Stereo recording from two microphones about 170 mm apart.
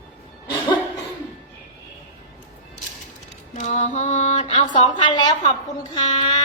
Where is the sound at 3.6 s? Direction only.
45° left (ahead or behind).